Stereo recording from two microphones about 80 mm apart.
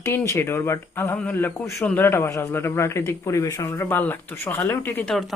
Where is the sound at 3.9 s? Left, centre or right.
Left.